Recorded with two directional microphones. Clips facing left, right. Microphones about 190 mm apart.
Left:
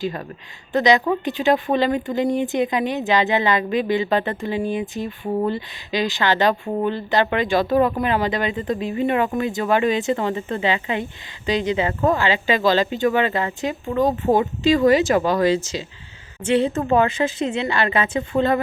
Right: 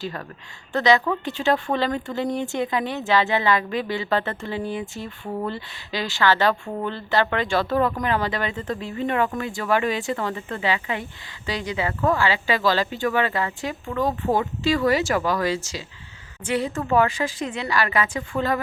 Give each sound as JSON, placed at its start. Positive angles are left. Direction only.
{"t": 0.7, "sound": "speech", "side_deg": 15}